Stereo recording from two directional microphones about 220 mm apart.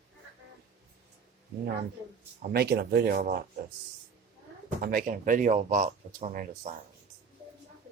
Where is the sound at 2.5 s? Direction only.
45° right (ahead or behind).